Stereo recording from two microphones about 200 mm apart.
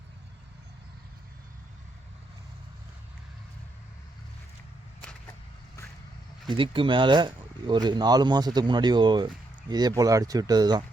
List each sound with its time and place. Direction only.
6.6 s speech: 25° right (ahead or behind)